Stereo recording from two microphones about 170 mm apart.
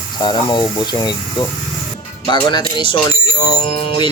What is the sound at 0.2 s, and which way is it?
Speech, 25° left (ahead or behind).